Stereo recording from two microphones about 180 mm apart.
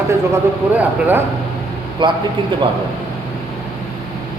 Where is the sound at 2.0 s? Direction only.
25° right (ahead or behind).